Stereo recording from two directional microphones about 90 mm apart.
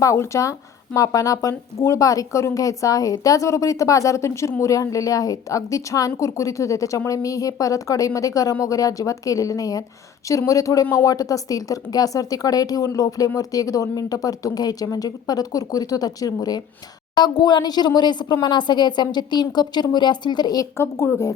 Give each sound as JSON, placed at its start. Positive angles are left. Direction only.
{"t": 0.0, "sound": "a woman's voice", "side_deg": 35}